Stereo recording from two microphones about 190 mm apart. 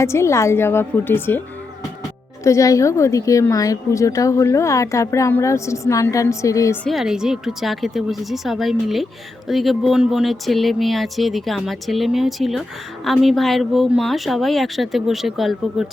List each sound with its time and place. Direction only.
0.0 s a woman's voice: 15° left (ahead or behind)
2.4 s a woman's voice: 15° left (ahead or behind)
6.8 s speech: centre (ahead or behind)